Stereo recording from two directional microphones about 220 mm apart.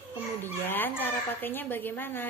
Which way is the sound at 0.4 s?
10° left (ahead or behind).